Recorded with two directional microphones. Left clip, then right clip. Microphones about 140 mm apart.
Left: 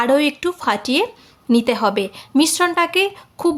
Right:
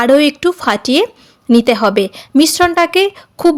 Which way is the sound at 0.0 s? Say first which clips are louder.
Right 6 dB; 40° right (ahead or behind).